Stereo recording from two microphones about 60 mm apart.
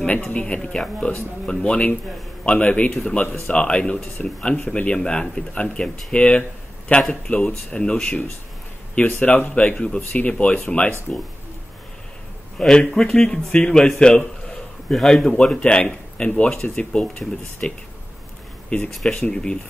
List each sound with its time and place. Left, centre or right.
0.0 s speech: left
2.9 s speech: centre
3.4 s speech: centre
12.5 s a man's voice: centre
18.9 s speech: centre